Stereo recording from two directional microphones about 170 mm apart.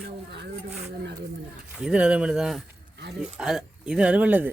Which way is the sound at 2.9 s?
80° right.